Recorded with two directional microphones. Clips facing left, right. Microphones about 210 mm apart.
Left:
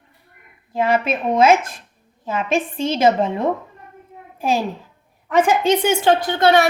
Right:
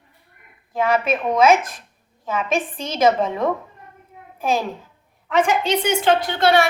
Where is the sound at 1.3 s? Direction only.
30° left (ahead or behind).